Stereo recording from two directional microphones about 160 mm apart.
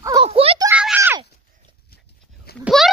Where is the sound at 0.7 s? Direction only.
10° right (ahead or behind).